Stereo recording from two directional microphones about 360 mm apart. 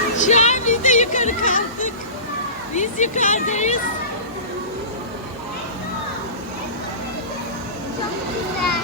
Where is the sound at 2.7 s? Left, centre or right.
Centre.